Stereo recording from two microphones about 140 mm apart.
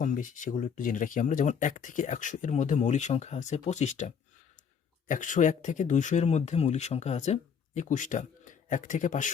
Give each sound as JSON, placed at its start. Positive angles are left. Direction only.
{"t": 0.0, "sound": "speech", "side_deg": 65}